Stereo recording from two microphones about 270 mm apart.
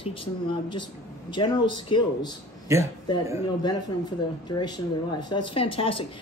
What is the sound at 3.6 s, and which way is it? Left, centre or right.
Speech, centre.